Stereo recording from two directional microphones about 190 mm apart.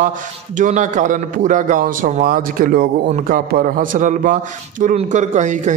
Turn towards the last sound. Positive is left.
turn(degrees=-40)  # may be behind; listen again after turning